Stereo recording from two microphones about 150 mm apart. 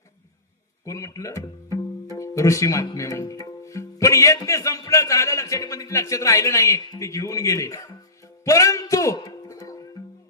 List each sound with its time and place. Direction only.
0.9 s speech: 20° left (ahead or behind)
8.2 s music: 20° left (ahead or behind)